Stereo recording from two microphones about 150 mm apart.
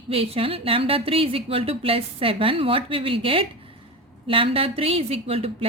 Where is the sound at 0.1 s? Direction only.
40° right (ahead or behind).